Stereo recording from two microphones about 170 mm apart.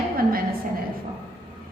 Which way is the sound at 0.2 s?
60° right (ahead or behind).